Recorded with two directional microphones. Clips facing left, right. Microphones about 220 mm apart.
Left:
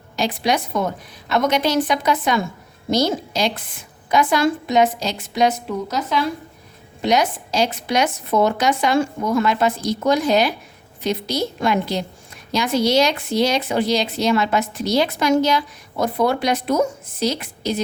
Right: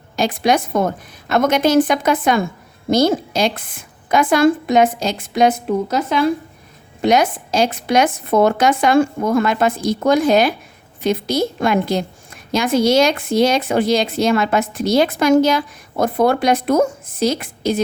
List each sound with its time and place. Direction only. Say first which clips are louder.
0.2 s a woman's voice: right 4 dB; 50° right (ahead or behind)